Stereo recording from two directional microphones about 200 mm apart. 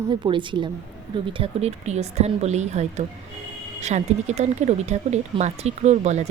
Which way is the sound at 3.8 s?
35° right (ahead or behind).